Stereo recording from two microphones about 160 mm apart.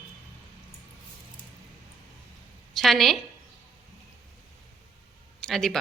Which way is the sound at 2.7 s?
Centre (ahead or behind).